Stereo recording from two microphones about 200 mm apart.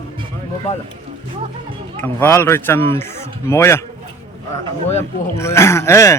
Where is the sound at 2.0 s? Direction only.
10° left (ahead or behind).